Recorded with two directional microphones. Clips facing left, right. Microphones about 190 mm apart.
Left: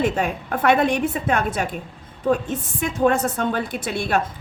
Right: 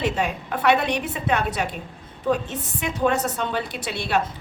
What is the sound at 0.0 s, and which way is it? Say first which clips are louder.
A woman's voice: left 3 dB; 50° left (ahead or behind).